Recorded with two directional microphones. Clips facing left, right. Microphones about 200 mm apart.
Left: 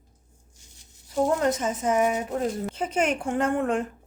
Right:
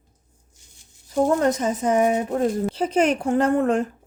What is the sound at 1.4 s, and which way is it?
Speech, 35° right (ahead or behind).